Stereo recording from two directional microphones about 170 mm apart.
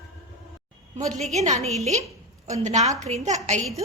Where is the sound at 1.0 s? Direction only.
45° right (ahead or behind).